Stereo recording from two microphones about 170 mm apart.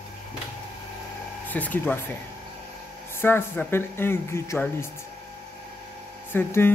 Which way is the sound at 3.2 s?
10° left (ahead or behind).